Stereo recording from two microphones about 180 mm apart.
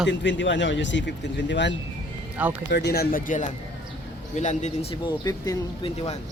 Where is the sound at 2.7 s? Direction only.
65° left (ahead or behind); by 5.1 s 35° left (ahead or behind).